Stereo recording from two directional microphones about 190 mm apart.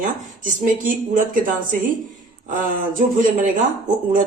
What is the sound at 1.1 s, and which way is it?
Speech, 45° right (ahead or behind).